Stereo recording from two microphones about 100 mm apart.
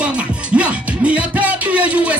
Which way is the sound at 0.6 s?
10° right (ahead or behind).